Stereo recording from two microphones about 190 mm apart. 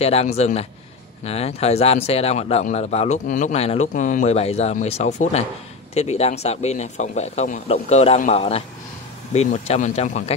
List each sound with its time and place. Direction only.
0.0 s a man's voice: 35° left (ahead or behind)